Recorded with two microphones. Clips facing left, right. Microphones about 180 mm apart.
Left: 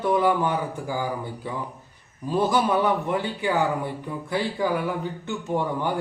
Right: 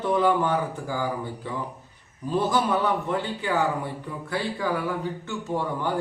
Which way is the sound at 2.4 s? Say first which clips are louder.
Left 2 dB; 15° left (ahead or behind).